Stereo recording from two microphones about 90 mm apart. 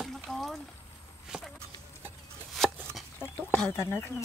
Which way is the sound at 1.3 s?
10° right (ahead or behind).